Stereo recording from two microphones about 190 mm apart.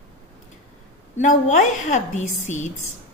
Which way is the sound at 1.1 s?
40° left (ahead or behind).